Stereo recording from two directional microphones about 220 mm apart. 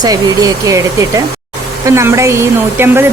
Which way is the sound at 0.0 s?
15° right (ahead or behind).